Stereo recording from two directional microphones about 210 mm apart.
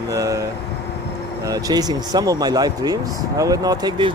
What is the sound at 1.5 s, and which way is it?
Speech, 15° right (ahead or behind).